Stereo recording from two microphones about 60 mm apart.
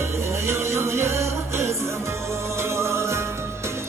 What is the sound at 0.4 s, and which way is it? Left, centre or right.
Music, right.